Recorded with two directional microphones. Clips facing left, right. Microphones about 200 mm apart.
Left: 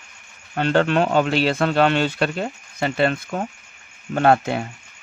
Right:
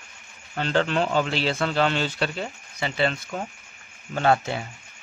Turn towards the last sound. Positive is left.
turn(degrees=55)  # may be behind; listen again after turning